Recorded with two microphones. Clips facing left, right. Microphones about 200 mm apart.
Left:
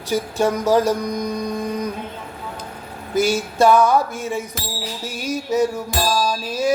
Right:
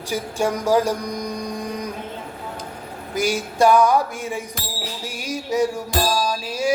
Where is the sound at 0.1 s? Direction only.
10° right (ahead or behind).